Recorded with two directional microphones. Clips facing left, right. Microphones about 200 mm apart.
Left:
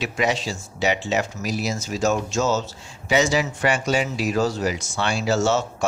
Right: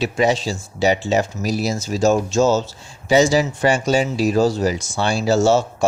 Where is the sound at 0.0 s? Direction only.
30° right (ahead or behind).